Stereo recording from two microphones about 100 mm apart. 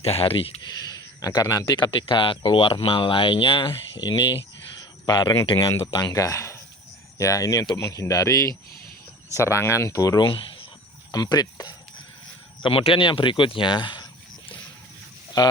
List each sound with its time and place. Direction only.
0.0 s speech: 80° left
0.7 s speech: 40° left (ahead or behind); by 3.8 s 65° left (ahead or behind)
4.0 s speech: 55° left (ahead or behind); by 10.2 s 35° left (ahead or behind)
10.2 s a sound: 60° left (ahead or behind)
11.1 s speech: 40° left (ahead or behind)
12.6 s speech: 65° left (ahead or behind)